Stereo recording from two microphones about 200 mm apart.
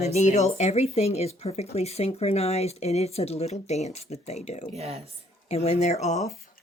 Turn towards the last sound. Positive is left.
turn(degrees=35)  # may be behind; listen again after turning